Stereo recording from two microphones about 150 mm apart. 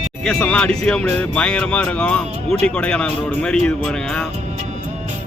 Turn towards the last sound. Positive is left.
turn(degrees=5)  # may be behind; listen again after turning